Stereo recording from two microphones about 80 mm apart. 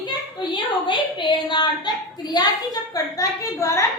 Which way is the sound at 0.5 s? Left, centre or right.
Left.